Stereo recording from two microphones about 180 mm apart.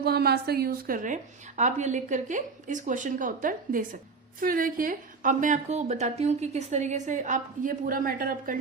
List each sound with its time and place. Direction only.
0.0 s a woman's voice: 60° right (ahead or behind)